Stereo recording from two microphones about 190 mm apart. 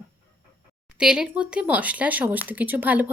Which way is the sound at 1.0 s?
5° right (ahead or behind).